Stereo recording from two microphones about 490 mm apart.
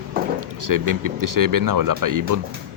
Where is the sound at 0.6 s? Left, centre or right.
Right.